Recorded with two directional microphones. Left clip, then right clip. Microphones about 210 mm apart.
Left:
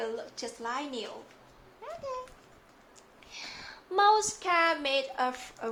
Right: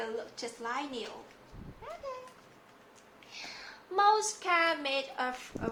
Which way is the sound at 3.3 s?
30° left (ahead or behind).